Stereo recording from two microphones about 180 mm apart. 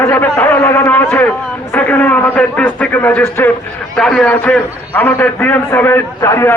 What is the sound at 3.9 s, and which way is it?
A man's voice, centre (ahead or behind).